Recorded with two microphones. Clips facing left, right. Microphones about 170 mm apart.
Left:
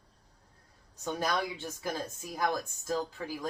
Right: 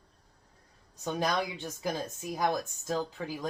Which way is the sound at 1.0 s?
15° right (ahead or behind).